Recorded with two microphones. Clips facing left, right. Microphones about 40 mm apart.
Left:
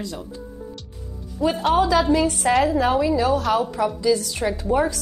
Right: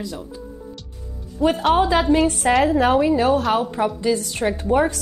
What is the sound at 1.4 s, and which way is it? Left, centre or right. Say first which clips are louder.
Speech: right 3 dB; right.